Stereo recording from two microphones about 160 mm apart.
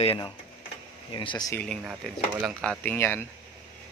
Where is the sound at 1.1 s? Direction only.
30° left (ahead or behind).